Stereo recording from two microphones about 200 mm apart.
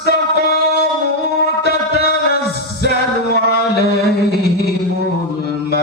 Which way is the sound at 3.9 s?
55° left (ahead or behind).